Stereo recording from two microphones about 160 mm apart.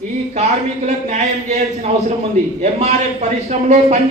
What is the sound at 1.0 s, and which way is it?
Speech, 45° right (ahead or behind).